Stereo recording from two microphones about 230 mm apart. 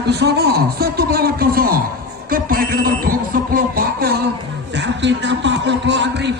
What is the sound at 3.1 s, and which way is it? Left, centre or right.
Music, right.